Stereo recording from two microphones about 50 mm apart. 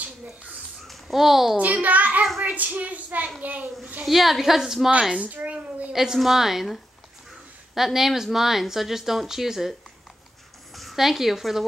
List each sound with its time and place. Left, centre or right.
0.0 s a sound: right
0.8 s a child's voice: centre
1.6 s a woman's voice: right
4.0 s a woman's voice: centre
5.2 s a woman's voice: right
5.9 s a woman's voice: centre